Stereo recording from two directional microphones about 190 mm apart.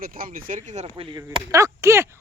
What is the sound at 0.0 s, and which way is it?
Speech, 50° right (ahead or behind).